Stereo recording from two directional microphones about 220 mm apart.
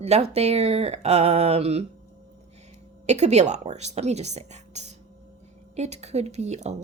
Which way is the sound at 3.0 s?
30° right (ahead or behind).